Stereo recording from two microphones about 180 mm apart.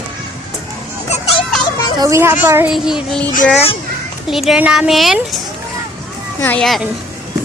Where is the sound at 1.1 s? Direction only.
35° left (ahead or behind).